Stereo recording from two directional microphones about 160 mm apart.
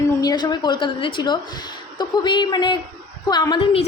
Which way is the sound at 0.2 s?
25° left (ahead or behind).